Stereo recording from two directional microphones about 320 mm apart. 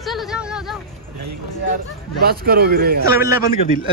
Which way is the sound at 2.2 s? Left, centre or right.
Right.